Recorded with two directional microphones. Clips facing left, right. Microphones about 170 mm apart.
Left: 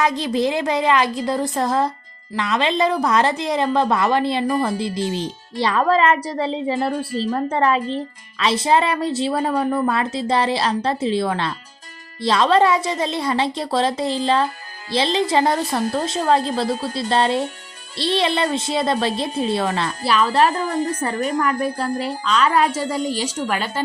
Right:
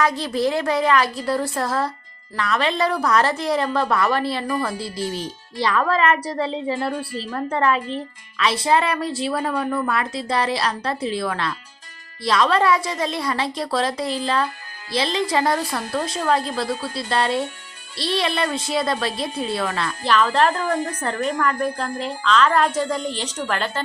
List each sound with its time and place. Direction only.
0.0 s a woman's voice: 20° left (ahead or behind)
20.1 s a woman's voice: 10° left (ahead or behind)